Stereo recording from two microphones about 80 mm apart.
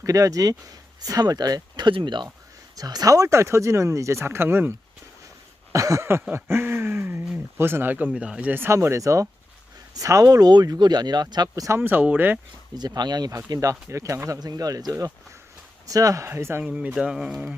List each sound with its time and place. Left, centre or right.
0.0 s speech: right
2.7 s speech: right
5.7 s speech: right
8.7 s speech: right
11.8 s speech: right
12.7 s speech: right
14.3 s speech: right; by 17.6 s centre